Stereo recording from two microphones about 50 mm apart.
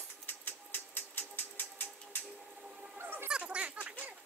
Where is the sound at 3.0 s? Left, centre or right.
Right.